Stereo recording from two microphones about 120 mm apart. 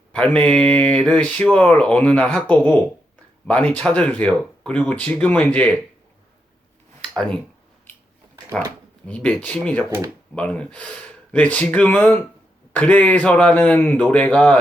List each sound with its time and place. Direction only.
0.2 s speech: 10° left (ahead or behind)
7.1 s speech: 5° left (ahead or behind)
9.0 s speech: 10° left (ahead or behind)